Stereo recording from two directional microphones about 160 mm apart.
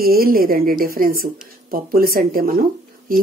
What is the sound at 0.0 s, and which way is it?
A woman's voice, 70° right (ahead or behind).